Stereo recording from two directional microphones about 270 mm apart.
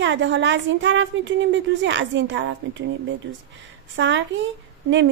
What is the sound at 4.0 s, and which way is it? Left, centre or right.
Speech, right.